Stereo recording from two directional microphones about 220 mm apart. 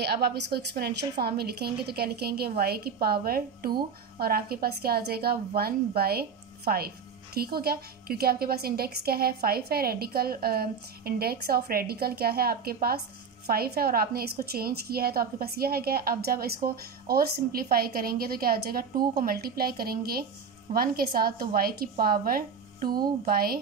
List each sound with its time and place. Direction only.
0.0 s a woman's voice: 45° right (ahead or behind)